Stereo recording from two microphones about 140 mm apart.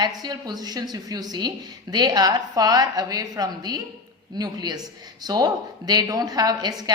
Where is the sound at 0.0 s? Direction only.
30° right (ahead or behind).